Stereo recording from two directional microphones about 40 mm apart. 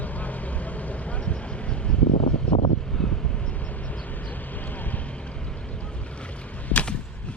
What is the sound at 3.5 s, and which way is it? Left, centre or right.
Vehicle, left.